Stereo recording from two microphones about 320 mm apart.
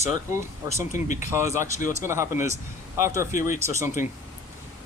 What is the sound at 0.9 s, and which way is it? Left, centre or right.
Speech, left.